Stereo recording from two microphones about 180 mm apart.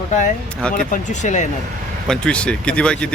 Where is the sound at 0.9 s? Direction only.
40° left (ahead or behind).